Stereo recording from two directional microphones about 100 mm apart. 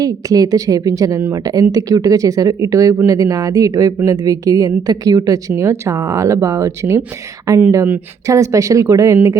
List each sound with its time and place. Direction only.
0.0 s speech: 35° right (ahead or behind)